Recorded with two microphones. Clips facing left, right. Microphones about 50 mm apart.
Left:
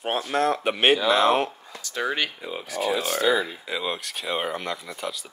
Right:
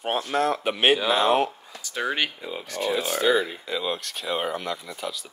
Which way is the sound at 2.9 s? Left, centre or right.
Centre.